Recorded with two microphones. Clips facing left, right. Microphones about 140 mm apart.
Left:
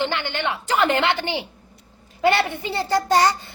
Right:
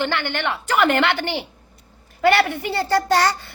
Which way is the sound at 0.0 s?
15° left (ahead or behind).